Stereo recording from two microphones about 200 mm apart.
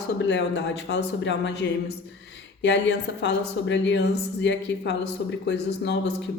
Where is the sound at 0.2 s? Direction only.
65° left (ahead or behind).